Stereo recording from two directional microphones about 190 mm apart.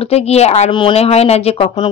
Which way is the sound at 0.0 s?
35° left (ahead or behind).